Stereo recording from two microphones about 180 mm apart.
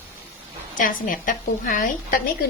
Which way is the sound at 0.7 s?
50° left (ahead or behind).